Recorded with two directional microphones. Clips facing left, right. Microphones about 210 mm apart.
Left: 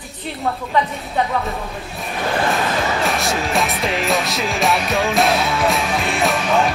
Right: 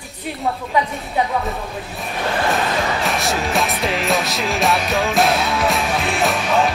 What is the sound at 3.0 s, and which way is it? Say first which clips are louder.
Music: even; centre (ahead or behind).